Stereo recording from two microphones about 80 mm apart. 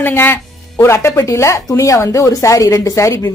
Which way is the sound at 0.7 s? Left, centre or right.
Left.